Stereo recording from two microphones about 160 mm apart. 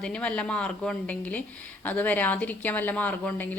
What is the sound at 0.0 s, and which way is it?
Speech, 5° left (ahead or behind).